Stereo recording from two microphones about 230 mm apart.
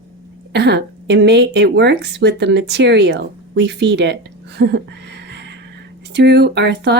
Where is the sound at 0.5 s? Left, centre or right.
Right.